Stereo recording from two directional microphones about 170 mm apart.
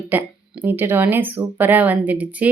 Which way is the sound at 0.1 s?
10° right (ahead or behind).